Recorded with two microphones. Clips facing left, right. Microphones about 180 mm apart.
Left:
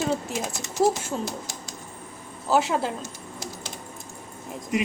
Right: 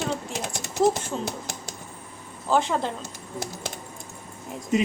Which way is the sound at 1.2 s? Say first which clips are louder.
Even; 60° right (ahead or behind).